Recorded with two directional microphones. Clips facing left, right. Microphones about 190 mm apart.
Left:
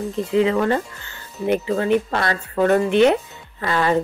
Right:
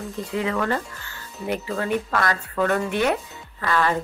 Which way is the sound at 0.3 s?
25° left (ahead or behind).